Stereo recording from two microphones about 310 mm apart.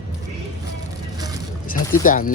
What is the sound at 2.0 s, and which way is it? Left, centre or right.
Speech, left.